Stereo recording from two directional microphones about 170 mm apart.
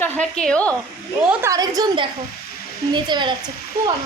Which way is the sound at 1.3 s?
15° right (ahead or behind).